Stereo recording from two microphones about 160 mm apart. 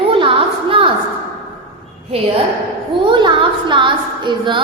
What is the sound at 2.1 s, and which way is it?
A woman's voice, 40° right (ahead or behind).